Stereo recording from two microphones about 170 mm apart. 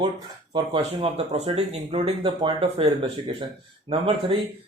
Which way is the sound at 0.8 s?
40° right (ahead or behind).